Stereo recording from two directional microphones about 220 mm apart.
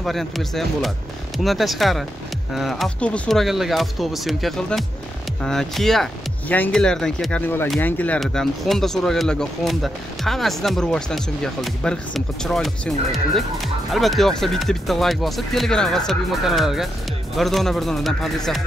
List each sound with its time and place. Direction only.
0.0 s speech: centre (ahead or behind)